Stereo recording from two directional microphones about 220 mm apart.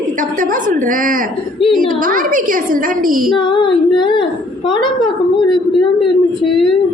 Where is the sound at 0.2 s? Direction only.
35° right (ahead or behind).